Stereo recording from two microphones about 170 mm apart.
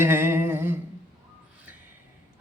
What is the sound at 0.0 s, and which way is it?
Humming, 15° right (ahead or behind).